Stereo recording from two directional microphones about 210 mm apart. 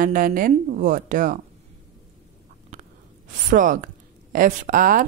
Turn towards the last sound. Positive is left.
turn(degrees=-40)  # may be behind; listen again after turning